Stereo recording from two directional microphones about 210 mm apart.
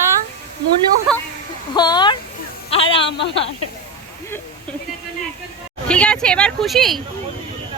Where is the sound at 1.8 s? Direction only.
20° left (ahead or behind).